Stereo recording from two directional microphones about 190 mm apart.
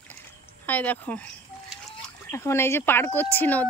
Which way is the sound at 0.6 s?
10° left (ahead or behind).